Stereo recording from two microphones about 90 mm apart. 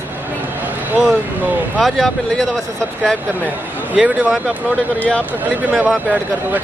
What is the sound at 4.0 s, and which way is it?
Speech, 10° right (ahead or behind).